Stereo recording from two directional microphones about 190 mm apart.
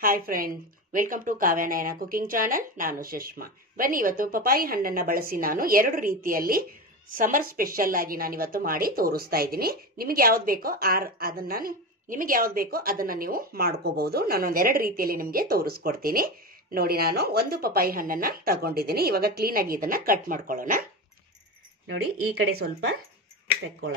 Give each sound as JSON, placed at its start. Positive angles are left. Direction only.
{"t": 0.0, "sound": "a woman's voice", "side_deg": -50}